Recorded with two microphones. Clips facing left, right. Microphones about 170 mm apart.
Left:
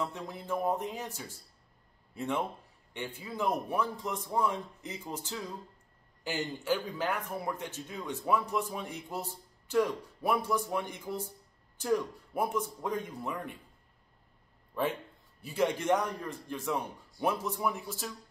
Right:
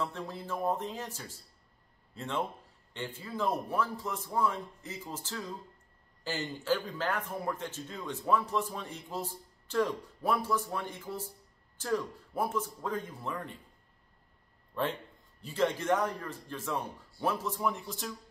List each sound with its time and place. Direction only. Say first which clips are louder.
0.0 s a man's voice: even; 15° left (ahead or behind)
14.7 s a man's voice: left 1 dB; 10° left (ahead or behind)